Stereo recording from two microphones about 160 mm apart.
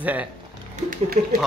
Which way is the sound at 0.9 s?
65° right (ahead or behind).